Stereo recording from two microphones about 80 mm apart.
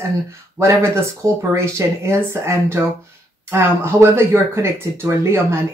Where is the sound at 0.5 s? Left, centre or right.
Right.